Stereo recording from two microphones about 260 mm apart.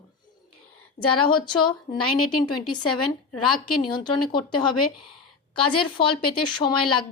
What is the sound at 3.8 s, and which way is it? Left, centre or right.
A woman's voice, centre.